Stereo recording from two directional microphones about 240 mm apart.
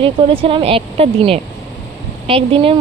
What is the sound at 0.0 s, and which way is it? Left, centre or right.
Speech, right.